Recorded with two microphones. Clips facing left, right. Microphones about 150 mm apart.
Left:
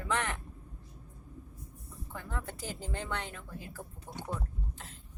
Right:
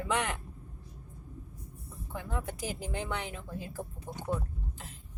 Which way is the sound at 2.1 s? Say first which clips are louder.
Right 4 dB; 15° right (ahead or behind).